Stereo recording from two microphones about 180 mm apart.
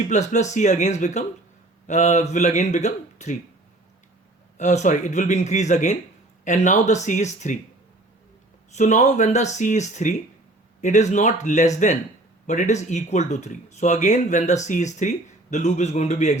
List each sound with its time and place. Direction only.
0.1 s speech: 40° left (ahead or behind)
4.5 s speech: 40° left (ahead or behind)
8.7 s speech: 40° left (ahead or behind)